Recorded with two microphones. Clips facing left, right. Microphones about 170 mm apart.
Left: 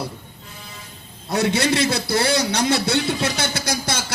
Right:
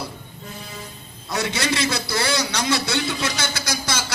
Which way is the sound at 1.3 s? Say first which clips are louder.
Left 5 dB; 60° left (ahead or behind).